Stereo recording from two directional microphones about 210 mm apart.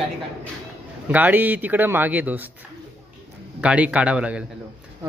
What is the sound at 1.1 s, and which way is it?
Speech, 10° right (ahead or behind).